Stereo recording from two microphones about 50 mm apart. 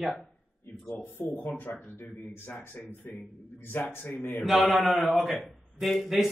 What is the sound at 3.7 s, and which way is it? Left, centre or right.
Speech, left.